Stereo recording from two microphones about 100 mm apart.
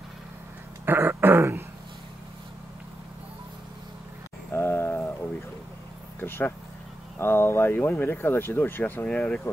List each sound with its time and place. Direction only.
0.8 s throat clearing: 20° right (ahead or behind)
4.5 s a sound: 25° left (ahead or behind)
6.1 s speech: 25° left (ahead or behind)